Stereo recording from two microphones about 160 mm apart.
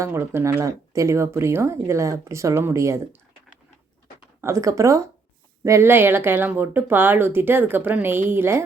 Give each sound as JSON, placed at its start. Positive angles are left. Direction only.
{"t": 0.0, "sound": "speech", "side_deg": -15}
{"t": 4.4, "sound": "speech", "side_deg": -20}